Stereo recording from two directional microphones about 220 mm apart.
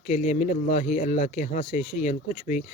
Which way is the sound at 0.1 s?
30° left (ahead or behind).